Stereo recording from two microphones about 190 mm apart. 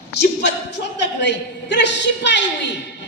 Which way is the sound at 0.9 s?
65° left (ahead or behind).